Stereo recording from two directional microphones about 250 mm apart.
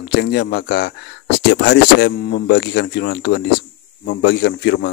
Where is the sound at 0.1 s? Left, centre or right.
Left.